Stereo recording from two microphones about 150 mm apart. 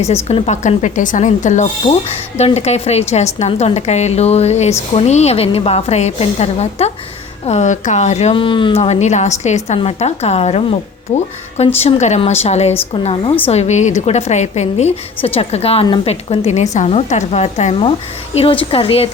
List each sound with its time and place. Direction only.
0.3 s a woman's voice: 45° left (ahead or behind)